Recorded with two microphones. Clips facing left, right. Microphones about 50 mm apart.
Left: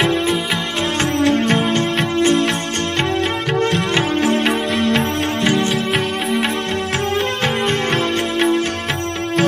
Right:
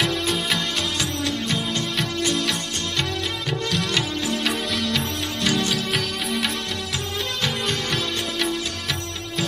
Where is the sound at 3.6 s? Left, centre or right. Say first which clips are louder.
Left 6 dB; left.